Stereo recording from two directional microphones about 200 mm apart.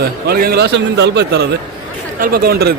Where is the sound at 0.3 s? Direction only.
50° right (ahead or behind).